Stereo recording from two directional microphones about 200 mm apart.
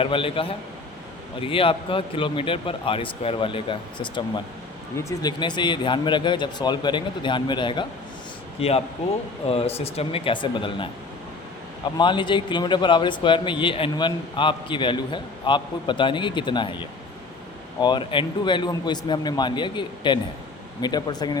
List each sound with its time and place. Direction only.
0.0 s a man's voice: 25° left (ahead or behind)
11.9 s a man's voice: 25° left (ahead or behind)
17.7 s a man's voice: 20° left (ahead or behind)